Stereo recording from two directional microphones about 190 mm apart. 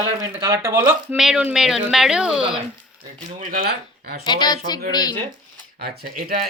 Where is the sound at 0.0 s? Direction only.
20° right (ahead or behind).